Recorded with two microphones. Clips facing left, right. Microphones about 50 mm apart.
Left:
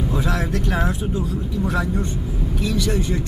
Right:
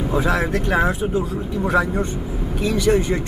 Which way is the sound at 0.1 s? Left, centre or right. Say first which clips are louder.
Right 7 dB; centre.